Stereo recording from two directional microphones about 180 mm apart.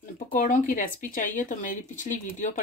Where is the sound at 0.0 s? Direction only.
45° left (ahead or behind).